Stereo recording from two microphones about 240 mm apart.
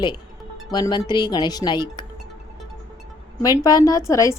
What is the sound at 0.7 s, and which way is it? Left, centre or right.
A woman's voice, centre.